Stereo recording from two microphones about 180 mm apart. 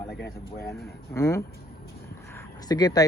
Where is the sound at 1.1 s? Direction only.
15° left (ahead or behind).